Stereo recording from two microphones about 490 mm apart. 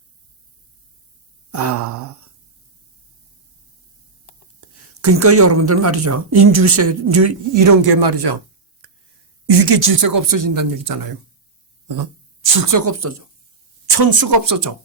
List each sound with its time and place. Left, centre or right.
1.5 s a sound: right
5.0 s speech: right
9.5 s a woman's voice: right
12.5 s speech: right
13.8 s a woman's voice: right